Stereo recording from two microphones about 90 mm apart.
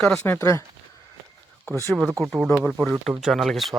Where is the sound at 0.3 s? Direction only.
35° left (ahead or behind).